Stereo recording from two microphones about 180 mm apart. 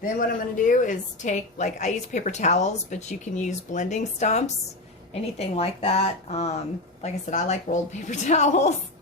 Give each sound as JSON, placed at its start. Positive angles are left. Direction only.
{"t": 0.0, "sound": "a woman's voice", "side_deg": 50}